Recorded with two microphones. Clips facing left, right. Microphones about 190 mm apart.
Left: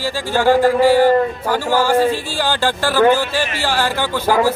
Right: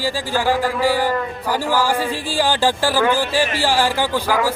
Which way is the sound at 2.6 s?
10° right (ahead or behind).